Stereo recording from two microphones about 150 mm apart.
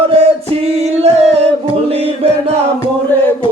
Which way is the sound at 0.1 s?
45° right (ahead or behind).